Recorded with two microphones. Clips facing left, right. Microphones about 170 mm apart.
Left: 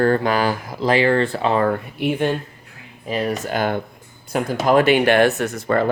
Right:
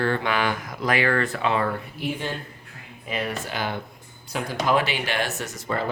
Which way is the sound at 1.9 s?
60° left (ahead or behind).